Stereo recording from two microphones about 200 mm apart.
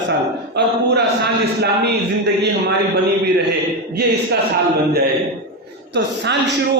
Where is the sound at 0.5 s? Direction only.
55° right (ahead or behind).